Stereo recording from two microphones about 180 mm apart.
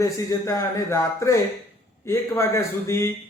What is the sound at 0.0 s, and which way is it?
A man's voice, 20° left (ahead or behind).